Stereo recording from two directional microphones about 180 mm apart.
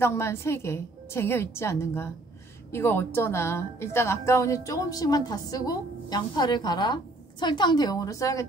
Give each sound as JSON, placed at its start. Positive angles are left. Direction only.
{"t": 0.0, "sound": "a woman's voice", "side_deg": 15}